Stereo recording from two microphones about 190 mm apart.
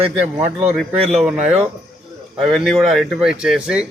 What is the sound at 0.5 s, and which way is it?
Speech, centre (ahead or behind).